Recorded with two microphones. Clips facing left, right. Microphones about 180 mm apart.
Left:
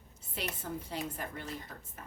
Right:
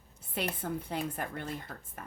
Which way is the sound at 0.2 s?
55° right (ahead or behind).